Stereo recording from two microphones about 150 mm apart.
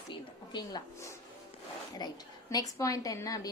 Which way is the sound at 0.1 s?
30° left (ahead or behind).